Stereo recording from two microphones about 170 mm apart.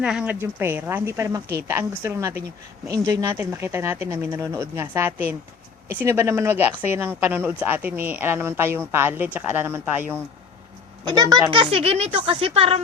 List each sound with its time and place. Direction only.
0.0 s speech: 5° right (ahead or behind)
11.0 s speech: 25° right (ahead or behind)